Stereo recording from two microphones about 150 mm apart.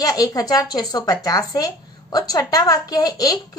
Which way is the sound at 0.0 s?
25° left (ahead or behind).